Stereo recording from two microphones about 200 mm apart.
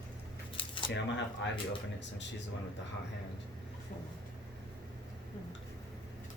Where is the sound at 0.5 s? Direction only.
25° left (ahead or behind).